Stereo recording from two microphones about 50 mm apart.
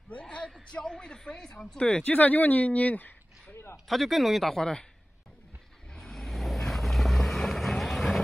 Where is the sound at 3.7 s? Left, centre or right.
Centre.